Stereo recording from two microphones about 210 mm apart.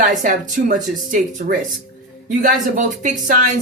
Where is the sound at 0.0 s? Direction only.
40° right (ahead or behind).